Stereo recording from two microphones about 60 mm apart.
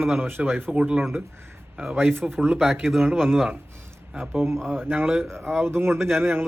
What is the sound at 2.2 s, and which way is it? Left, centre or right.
Speech, centre.